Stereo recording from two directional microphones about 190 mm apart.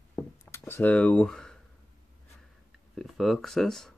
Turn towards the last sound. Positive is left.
turn(degrees=0)  # may be behind; listen again after turning